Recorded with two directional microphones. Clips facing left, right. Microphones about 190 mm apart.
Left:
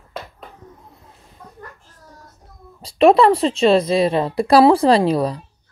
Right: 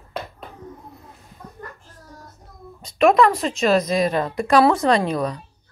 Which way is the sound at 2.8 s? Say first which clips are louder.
Left 3 dB; 30° left (ahead or behind).